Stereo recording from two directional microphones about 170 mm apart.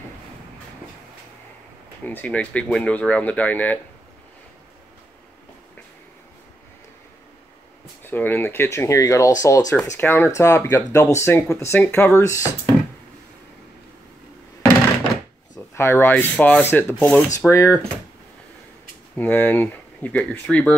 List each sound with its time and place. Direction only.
2.0 s speech: 10° left (ahead or behind)
8.0 s speech: 10° left (ahead or behind)
15.5 s speech: 15° left (ahead or behind)
19.1 s speech: 10° left (ahead or behind)